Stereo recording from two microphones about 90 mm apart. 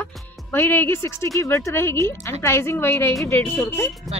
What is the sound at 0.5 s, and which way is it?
Speech, 20° left (ahead or behind).